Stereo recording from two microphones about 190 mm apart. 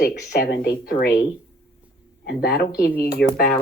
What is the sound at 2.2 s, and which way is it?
A woman's voice, 55° left (ahead or behind).